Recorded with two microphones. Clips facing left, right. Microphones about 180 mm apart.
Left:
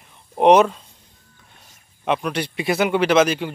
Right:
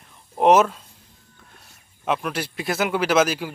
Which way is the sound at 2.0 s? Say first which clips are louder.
Left 3 dB; 5° right (ahead or behind).